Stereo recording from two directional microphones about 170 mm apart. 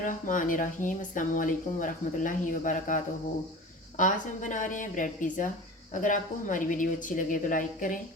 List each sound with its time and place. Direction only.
0.0 s speech: 50° left (ahead or behind)